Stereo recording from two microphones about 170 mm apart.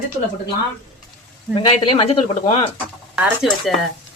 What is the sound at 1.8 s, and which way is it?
Speech, 35° left (ahead or behind).